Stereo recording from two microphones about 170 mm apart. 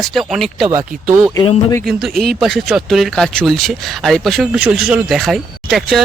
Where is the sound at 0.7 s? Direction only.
15° right (ahead or behind).